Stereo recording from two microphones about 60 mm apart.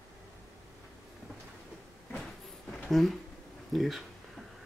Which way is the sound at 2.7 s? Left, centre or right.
Centre.